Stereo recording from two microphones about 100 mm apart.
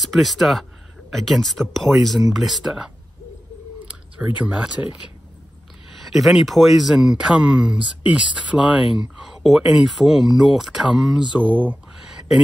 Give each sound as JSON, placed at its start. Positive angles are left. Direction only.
{"t": 0.0, "sound": "speech", "side_deg": 0}
{"t": 4.5, "sound": "speech", "side_deg": -10}
{"t": 5.9, "sound": "speech", "side_deg": 0}